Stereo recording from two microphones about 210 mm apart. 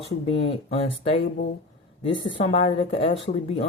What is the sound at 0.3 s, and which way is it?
Speech, 25° left (ahead or behind).